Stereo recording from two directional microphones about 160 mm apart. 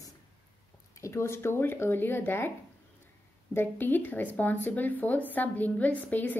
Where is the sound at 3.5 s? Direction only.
10° left (ahead or behind).